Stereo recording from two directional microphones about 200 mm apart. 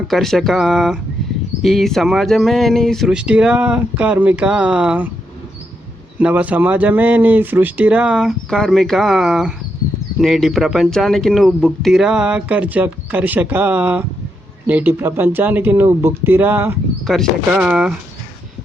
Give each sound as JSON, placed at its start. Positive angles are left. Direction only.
{"t": 0.1, "sound": "speech", "side_deg": 0}
{"t": 6.1, "sound": "speech", "side_deg": -5}